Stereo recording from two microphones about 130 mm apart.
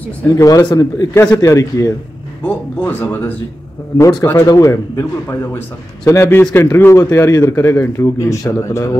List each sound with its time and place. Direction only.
0.4 s a man's voice: 25° left (ahead or behind)
2.4 s speech: 15° left (ahead or behind)
4.0 s a man's voice: 25° left (ahead or behind)